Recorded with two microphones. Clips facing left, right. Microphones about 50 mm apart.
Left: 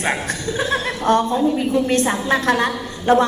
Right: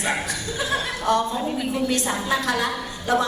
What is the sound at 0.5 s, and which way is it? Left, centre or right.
Speech, left.